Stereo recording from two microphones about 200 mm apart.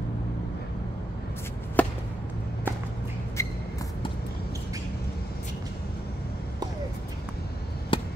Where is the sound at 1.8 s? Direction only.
10° left (ahead or behind).